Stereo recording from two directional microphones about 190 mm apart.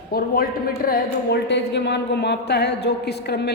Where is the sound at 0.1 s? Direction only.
50° left (ahead or behind).